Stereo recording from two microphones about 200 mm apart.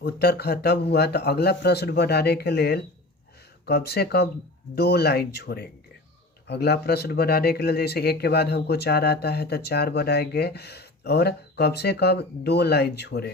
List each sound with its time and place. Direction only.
0.0 s speech: 55° left (ahead or behind)